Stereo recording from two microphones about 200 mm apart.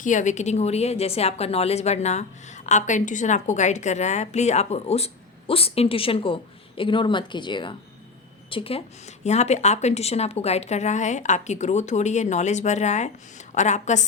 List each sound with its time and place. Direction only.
0.0 s a woman's voice: 40° left (ahead or behind)